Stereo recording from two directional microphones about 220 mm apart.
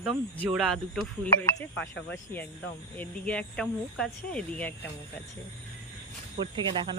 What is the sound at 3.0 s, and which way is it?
Speech, 5° left (ahead or behind).